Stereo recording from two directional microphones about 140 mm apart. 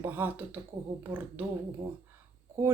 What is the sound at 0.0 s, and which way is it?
Speech, 15° right (ahead or behind).